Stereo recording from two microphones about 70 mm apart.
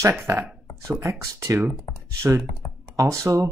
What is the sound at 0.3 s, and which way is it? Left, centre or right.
Speech, right.